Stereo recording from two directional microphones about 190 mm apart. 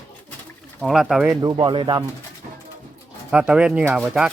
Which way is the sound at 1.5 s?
25° right (ahead or behind).